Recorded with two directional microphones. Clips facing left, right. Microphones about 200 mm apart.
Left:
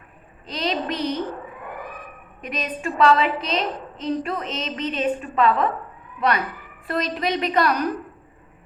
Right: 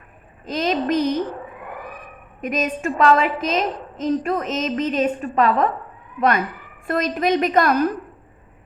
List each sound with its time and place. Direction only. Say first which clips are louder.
0.4 s a woman's voice: right 5 dB; 45° right (ahead or behind)
2.4 s a woman's voice: right 6 dB; 45° right (ahead or behind)